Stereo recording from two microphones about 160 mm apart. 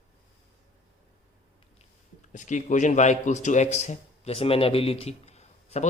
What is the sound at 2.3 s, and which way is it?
A man's voice, 50° left (ahead or behind).